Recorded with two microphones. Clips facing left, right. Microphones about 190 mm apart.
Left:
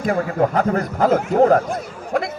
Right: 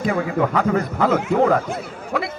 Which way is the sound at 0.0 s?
45° left (ahead or behind).